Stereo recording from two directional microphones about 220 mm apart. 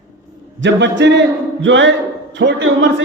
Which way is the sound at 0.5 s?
55° right (ahead or behind).